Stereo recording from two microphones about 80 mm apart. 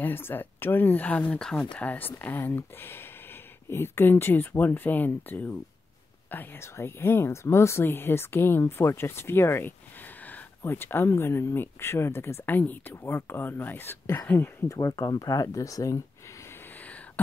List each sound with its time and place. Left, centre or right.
0.0 s speech: left
14.7 s speech: left